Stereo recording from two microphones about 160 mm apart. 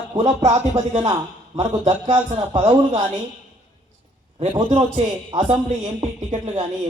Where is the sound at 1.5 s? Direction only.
45° right (ahead or behind).